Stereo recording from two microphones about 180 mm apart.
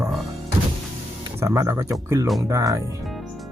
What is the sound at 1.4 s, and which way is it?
Speech, 15° right (ahead or behind).